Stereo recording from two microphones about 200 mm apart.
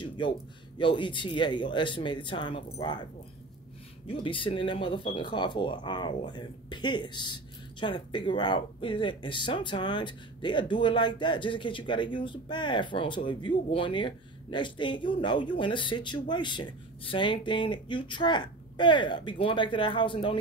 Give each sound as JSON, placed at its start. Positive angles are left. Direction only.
{"t": 0.2, "sound": "speech", "side_deg": 25}
{"t": 4.1, "sound": "speech", "side_deg": 25}